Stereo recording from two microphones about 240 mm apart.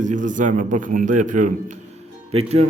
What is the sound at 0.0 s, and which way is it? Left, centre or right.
A man's voice, right.